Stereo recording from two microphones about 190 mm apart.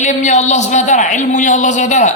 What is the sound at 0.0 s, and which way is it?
Speech, 40° left (ahead or behind).